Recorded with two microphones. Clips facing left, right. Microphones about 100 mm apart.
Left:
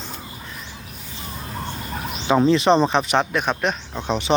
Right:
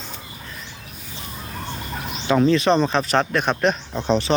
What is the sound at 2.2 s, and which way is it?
Speech, 20° left (ahead or behind).